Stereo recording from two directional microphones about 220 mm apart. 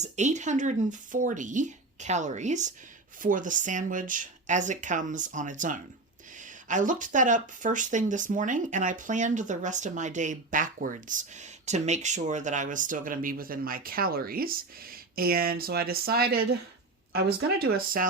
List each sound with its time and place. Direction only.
0.0 s speech: 30° right (ahead or behind)